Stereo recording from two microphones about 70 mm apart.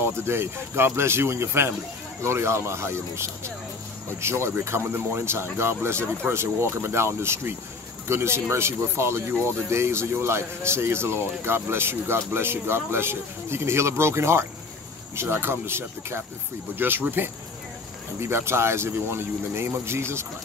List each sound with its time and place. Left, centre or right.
0.2 s speech: right